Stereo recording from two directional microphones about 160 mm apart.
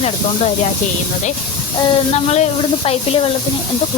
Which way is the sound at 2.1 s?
45° left (ahead or behind).